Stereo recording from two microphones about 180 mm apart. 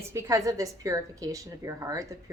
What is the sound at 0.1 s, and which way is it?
A woman's voice, 15° right (ahead or behind).